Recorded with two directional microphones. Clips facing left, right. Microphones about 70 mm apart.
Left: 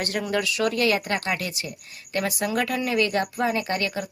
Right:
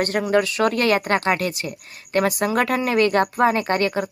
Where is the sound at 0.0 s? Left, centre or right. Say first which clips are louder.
Right 6 dB; right.